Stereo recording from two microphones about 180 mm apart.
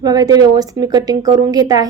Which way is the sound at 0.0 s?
20° right (ahead or behind).